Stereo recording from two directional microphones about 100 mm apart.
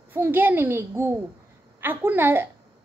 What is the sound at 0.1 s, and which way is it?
A woman's voice, 20° right (ahead or behind).